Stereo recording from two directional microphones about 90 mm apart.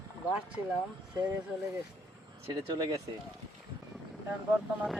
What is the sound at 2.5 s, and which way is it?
Speech, 50° right (ahead or behind).